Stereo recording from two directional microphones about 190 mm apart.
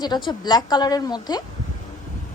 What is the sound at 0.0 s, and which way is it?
A woman's voice, 20° left (ahead or behind).